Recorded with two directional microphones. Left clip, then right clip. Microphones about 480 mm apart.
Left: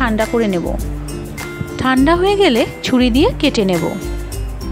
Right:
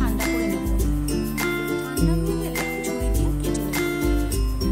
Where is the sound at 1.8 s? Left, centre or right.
Right.